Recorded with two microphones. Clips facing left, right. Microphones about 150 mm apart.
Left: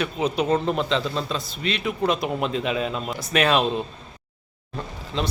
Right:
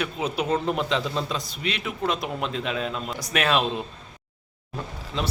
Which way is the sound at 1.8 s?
Centre (ahead or behind).